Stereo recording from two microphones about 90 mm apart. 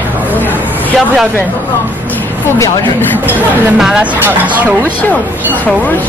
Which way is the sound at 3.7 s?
5° right (ahead or behind).